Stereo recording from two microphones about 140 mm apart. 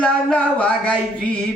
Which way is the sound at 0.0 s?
10° left (ahead or behind).